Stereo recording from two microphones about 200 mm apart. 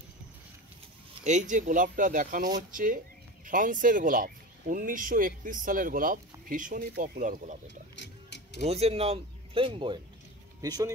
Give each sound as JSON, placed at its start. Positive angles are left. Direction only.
{"t": 1.2, "sound": "speech", "side_deg": -35}
{"t": 7.9, "sound": "music", "side_deg": 60}
{"t": 8.6, "sound": "speech", "side_deg": -30}